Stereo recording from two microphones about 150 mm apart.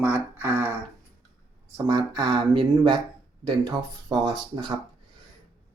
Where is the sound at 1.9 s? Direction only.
25° right (ahead or behind).